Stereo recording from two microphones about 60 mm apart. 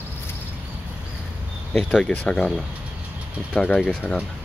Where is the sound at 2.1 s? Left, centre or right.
Centre.